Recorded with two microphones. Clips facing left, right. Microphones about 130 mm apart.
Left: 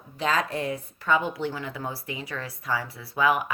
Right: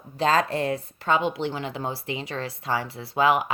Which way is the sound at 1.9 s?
90° right.